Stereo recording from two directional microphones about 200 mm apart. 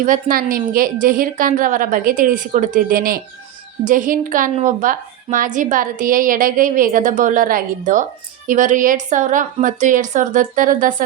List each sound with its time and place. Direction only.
0.0 s a woman's voice: 45° right (ahead or behind)